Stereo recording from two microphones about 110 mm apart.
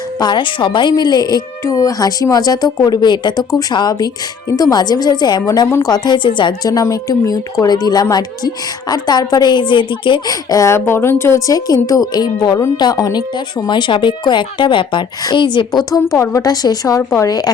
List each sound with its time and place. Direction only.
0.2 s a woman's voice: 45° left (ahead or behind)
5.6 s speech: 25° left (ahead or behind)
5.9 s a woman's voice: 45° left (ahead or behind)
10.5 s a woman's voice: 30° left (ahead or behind); by 15.8 s 45° left (ahead or behind)
16.1 s a woman's voice: 30° left (ahead or behind)